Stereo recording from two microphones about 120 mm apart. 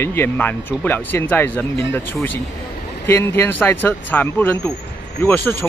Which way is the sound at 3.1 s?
20° left (ahead or behind).